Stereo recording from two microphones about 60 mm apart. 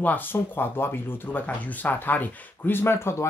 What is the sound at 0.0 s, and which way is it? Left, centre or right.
Speech, left.